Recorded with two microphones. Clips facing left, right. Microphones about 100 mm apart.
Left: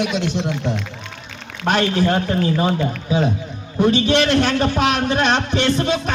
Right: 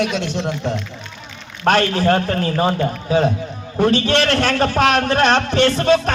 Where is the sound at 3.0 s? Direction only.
40° right (ahead or behind).